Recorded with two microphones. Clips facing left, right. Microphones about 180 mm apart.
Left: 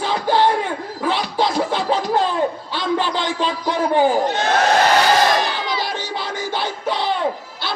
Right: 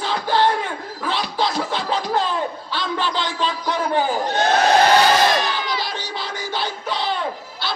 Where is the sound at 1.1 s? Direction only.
50° left (ahead or behind).